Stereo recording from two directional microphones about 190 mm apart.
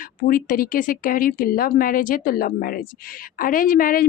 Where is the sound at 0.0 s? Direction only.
45° left (ahead or behind).